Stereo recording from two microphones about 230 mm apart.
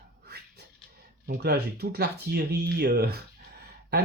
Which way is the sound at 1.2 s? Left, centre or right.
Right.